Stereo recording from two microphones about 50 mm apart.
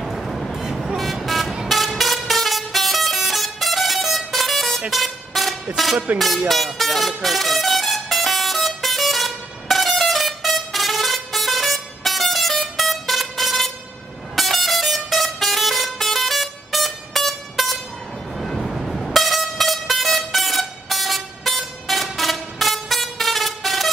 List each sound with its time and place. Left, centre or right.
0.0 s vehicle: centre
0.6 s toot: centre
1.7 s vehicle: centre
14.3 s vehicle horn: centre